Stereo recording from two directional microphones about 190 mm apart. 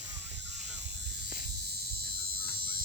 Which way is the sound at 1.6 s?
55° right (ahead or behind).